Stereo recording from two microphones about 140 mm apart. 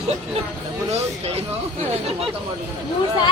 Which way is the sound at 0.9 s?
50° right (ahead or behind).